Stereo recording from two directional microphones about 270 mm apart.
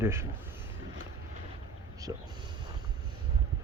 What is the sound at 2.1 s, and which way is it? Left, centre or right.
Speech, centre.